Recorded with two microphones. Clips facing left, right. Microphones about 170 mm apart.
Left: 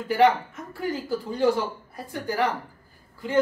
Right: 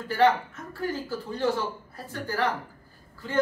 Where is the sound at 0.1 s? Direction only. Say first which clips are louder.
Left 2 dB; 15° left (ahead or behind).